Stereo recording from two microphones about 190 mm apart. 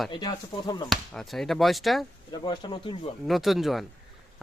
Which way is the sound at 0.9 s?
Centre (ahead or behind).